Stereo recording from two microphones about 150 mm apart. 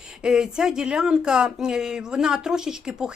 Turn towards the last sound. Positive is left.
turn(degrees=-5)  # may be behind; listen again after turning